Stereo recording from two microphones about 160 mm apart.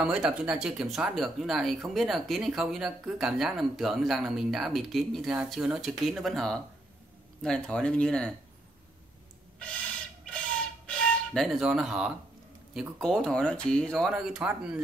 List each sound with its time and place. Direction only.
0.0 s speech: 5° right (ahead or behind)
10.9 s speech: centre (ahead or behind)